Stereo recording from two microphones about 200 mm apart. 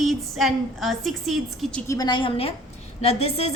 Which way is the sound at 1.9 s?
20° left (ahead or behind).